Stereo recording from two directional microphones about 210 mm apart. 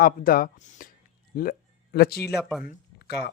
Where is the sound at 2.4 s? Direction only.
5° right (ahead or behind).